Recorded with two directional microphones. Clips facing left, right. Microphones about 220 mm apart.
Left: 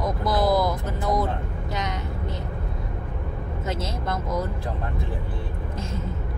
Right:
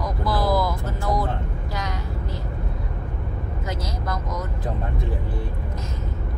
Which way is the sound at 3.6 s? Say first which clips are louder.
Left 2 dB; 25° left (ahead or behind).